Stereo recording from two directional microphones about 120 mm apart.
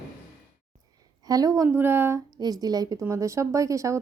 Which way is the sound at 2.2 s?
35° right (ahead or behind).